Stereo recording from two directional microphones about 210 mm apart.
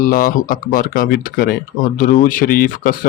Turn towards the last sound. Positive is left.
turn(degrees=45)  # may be behind; listen again after turning